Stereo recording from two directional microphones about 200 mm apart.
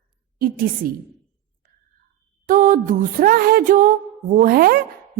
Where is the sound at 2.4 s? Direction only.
45° right (ahead or behind).